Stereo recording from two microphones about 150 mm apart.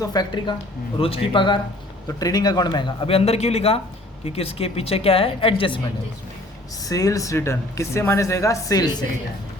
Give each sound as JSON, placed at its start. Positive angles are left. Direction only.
{"t": 0.0, "sound": "speech", "side_deg": 25}
{"t": 0.9, "sound": "speech", "side_deg": 40}
{"t": 6.8, "sound": "speech", "side_deg": 25}